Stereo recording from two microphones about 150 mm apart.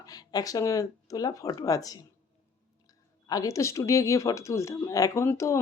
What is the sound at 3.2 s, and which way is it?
Speech, 25° left (ahead or behind).